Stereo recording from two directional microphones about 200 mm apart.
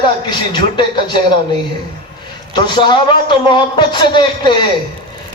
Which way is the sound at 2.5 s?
25° left (ahead or behind).